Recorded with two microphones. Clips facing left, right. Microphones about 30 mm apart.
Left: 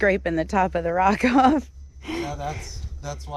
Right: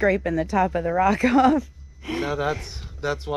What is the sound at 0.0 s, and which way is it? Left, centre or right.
A woman's voice, left.